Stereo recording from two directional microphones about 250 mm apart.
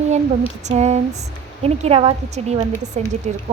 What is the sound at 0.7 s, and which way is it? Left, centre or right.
Speech, right.